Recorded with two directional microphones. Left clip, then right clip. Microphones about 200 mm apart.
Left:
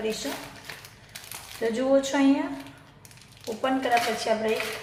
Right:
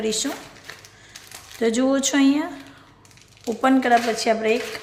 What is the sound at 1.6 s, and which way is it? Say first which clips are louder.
Speech: right 3 dB; 50° right (ahead or behind).